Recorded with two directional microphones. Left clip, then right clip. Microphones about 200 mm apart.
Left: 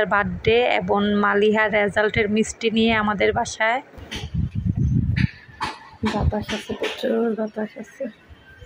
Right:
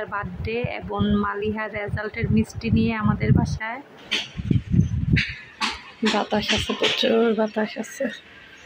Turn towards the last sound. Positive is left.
turn(degrees=5)  # may be behind; listen again after turning